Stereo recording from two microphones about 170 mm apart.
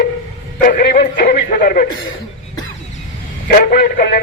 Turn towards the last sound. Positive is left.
turn(degrees=65)  # may be behind; listen again after turning